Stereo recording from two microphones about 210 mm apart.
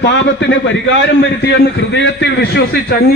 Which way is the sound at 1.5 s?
55° left (ahead or behind).